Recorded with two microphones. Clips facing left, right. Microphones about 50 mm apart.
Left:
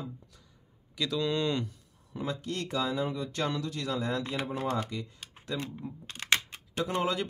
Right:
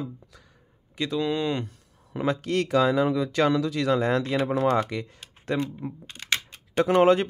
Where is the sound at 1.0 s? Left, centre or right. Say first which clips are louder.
Right 4 dB; right.